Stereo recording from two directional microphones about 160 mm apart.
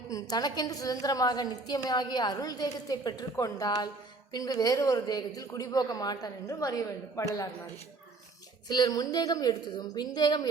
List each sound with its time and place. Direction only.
0.1 s a woman's voice: 25° left (ahead or behind)
8.6 s a woman's voice: 25° left (ahead or behind)